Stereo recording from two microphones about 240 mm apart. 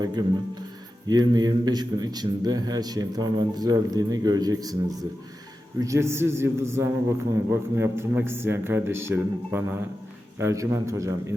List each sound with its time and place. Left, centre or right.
0.0 s a man's voice: centre